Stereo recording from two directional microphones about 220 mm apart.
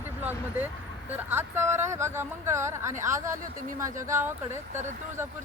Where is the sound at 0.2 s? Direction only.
10° right (ahead or behind).